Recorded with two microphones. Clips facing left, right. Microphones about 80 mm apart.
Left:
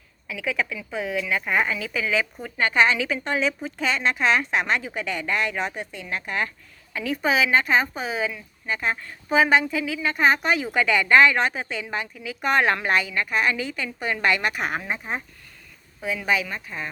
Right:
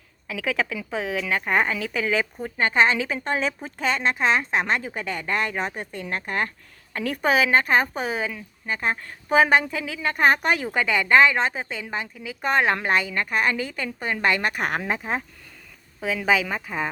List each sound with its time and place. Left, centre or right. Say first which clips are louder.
0.3 s a woman's voice: right 1 dB; right
2.4 s a woman's voice: even; right
6.9 s a woman's voice: right 1 dB; right
10.8 s a woman's voice: left 1 dB; right
14.6 s speech: right 2 dB; right